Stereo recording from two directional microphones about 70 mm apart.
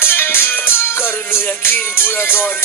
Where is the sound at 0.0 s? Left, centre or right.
Left.